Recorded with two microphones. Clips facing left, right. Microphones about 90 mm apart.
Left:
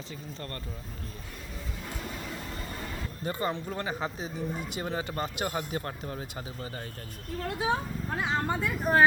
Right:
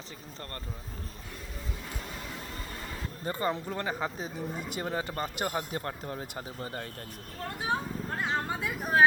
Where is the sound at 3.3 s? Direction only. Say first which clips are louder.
Even; 40° right (ahead or behind); by 6.8 s 60° right (ahead or behind).